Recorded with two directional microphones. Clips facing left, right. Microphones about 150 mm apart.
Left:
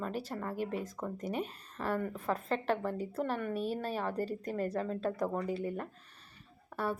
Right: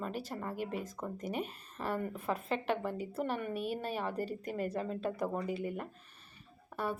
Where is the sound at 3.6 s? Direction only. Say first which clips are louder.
Left 2 dB; 30° left (ahead or behind).